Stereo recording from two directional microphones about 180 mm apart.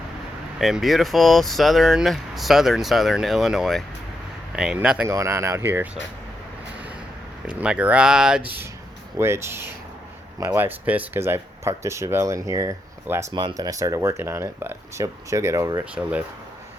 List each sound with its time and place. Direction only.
0.6 s speech: centre (ahead or behind)
7.4 s speech: 5° right (ahead or behind)